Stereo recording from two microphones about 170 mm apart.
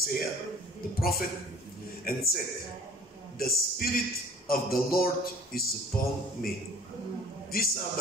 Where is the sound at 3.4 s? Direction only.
60° left (ahead or behind).